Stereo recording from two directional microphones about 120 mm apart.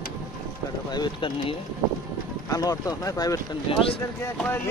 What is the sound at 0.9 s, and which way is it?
Speech, 40° left (ahead or behind).